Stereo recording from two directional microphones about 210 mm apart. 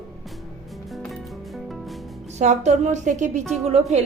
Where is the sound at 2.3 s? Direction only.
35° right (ahead or behind).